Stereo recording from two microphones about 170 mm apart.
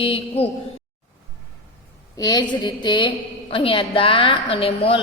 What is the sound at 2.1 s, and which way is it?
A woman's voice, 25° left (ahead or behind).